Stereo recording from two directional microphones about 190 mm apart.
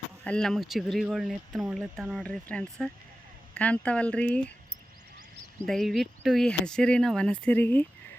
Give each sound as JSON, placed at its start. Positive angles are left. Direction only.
{"t": 0.3, "sound": "speech", "side_deg": 5}
{"t": 5.5, "sound": "speech", "side_deg": 0}